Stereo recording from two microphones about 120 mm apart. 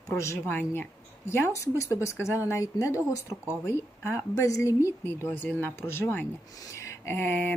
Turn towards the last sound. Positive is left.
turn(degrees=15)  # may be behind; listen again after turning